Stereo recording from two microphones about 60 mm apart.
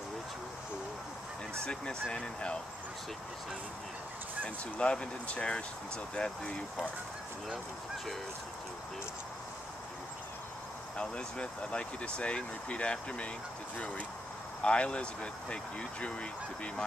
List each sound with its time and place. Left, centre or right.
1.6 s speech: centre
4.4 s speech: centre
11.0 s speech: centre
14.6 s speech: centre